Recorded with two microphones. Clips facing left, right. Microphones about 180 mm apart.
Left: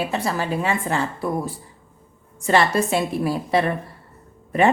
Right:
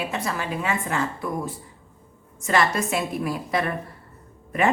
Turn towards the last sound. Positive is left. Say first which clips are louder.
# left 4 dB
turn(degrees=30)  # may be behind; listen again after turning